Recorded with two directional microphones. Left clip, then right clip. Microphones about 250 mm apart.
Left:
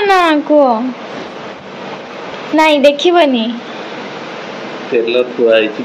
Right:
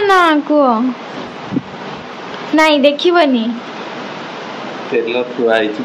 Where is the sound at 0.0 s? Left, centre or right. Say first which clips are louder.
Even; centre.